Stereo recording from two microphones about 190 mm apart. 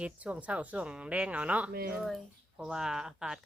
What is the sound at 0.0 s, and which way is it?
Speech, 5° right (ahead or behind).